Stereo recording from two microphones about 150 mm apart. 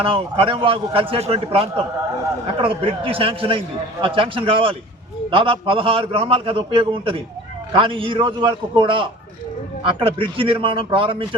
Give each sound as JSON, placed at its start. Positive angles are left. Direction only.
{"t": 0.0, "sound": "a man's voice", "side_deg": -40}